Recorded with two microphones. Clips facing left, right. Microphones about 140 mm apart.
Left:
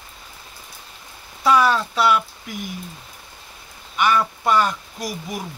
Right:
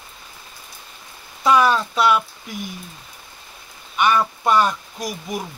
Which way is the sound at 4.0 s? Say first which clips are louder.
Right 1 dB; 20° right (ahead or behind).